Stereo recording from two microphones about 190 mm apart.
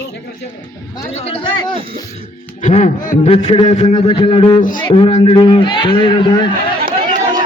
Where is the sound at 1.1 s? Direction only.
30° left (ahead or behind).